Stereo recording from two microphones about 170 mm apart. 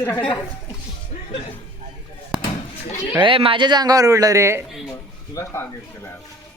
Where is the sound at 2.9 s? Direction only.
40° left (ahead or behind).